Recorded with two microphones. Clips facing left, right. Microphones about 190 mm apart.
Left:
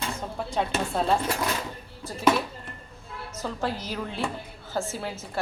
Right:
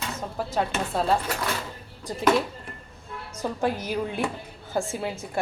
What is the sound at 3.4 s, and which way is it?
Dishes, 15° right (ahead or behind).